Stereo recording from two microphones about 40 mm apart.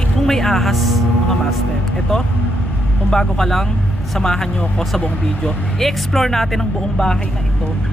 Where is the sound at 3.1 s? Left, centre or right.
Centre.